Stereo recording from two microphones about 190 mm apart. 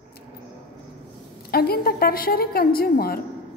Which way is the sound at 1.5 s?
55° left (ahead or behind).